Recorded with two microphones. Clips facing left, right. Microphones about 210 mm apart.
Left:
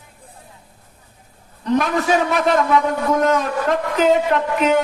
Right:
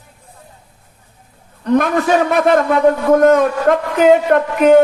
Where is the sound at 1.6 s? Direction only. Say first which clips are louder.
Right 4 dB; 55° right (ahead or behind).